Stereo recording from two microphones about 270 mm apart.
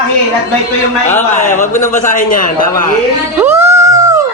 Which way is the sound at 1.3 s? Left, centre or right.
Left.